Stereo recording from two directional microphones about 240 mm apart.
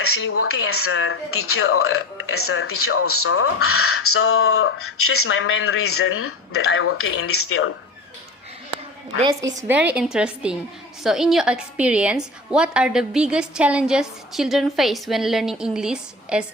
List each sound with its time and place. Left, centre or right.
0.0 s speech: left
9.6 s a woman's voice: centre